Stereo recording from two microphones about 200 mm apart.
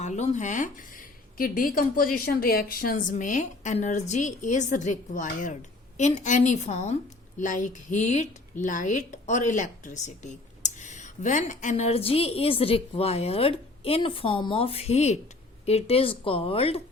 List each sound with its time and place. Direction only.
0.0 s a woman's voice: 35° left (ahead or behind)